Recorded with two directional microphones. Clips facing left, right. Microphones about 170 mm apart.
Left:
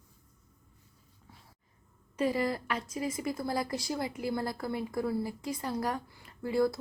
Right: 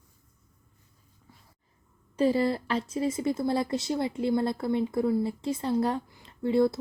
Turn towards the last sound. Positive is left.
turn(degrees=-25)  # may be behind; listen again after turning